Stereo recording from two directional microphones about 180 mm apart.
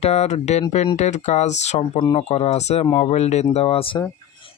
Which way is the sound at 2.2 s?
35° left (ahead or behind).